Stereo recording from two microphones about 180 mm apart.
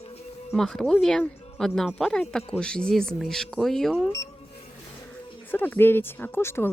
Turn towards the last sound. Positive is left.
turn(degrees=15)  # may be behind; listen again after turning